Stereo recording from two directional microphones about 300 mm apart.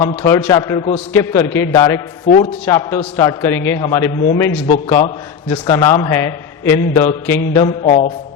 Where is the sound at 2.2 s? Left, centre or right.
Left.